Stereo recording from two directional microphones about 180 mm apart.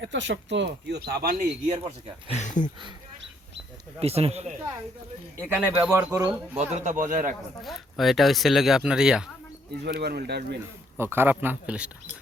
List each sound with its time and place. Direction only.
0.0 s speech: 85° right; by 1.9 s 40° right (ahead or behind)
2.2 s speech: 40° left (ahead or behind)
4.0 s speech: 35° right (ahead or behind)
5.5 s speech: 10° right (ahead or behind)
6.6 s a man's voice: 40° right (ahead or behind)
7.6 s speech: centre (ahead or behind)
9.7 s speech: 65° right (ahead or behind)
10.9 s speech: 15° right (ahead or behind)